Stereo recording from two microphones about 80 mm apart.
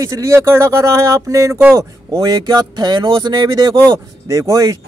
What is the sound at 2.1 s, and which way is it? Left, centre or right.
Speech, right.